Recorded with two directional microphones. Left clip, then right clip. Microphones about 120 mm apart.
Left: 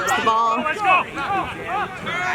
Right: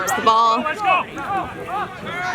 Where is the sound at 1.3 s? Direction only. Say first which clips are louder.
Even; 5° left (ahead or behind).